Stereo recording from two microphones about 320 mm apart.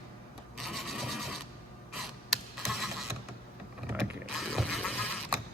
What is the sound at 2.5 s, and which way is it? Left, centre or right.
Scratch, centre.